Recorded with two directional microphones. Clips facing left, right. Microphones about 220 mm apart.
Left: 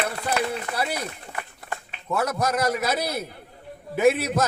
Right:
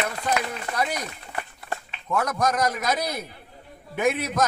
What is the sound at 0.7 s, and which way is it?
Speech, 10° left (ahead or behind).